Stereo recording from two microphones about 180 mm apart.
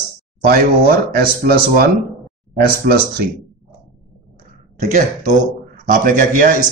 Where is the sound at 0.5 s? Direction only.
55° right (ahead or behind).